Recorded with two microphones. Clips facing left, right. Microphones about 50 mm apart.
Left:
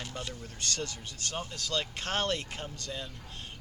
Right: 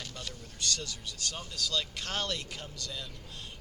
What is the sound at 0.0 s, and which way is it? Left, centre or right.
Speech, left.